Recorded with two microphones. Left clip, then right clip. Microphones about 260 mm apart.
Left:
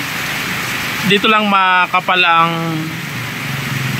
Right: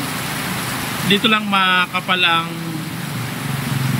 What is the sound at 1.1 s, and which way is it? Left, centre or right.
Speech, centre.